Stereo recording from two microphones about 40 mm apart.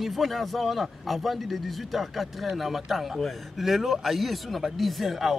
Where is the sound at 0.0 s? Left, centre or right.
Centre.